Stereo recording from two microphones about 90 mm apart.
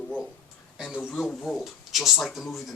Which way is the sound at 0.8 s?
20° left (ahead or behind).